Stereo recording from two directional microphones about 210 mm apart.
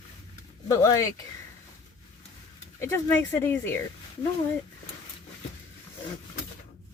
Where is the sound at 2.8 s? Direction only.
10° left (ahead or behind).